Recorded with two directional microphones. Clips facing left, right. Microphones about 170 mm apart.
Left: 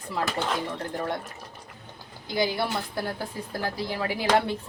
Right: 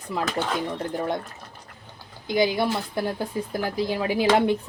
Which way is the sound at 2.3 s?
20° right (ahead or behind).